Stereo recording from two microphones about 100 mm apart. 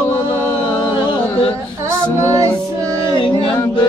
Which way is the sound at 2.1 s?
30° right (ahead or behind).